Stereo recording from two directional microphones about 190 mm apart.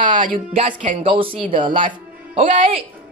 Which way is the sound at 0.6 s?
45° right (ahead or behind).